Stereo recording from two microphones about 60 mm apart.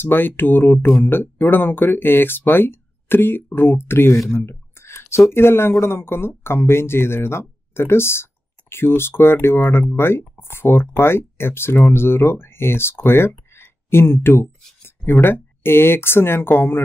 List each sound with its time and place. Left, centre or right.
0.0 s speech: left
4.4 s a sound: left
5.3 s speech: left